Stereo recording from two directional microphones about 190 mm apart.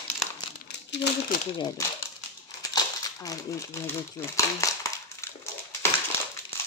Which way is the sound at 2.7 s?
20° left (ahead or behind).